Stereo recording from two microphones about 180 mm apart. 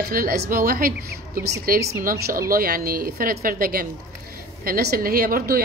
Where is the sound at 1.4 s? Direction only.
65° right (ahead or behind).